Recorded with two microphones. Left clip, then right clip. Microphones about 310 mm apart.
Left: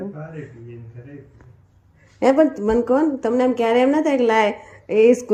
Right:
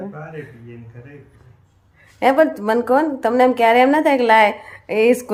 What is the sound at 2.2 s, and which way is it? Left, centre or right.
A woman's voice, centre.